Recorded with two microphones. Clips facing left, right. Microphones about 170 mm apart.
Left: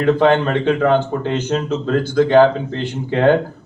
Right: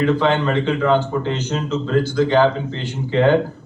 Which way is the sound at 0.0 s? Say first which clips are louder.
Left 3 dB; 55° left (ahead or behind).